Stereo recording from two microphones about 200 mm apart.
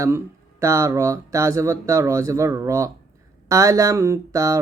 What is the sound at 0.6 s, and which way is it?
Speech, 15° right (ahead or behind).